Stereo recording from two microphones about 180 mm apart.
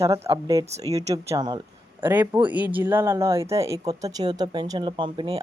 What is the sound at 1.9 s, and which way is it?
A man's voice, 10° right (ahead or behind).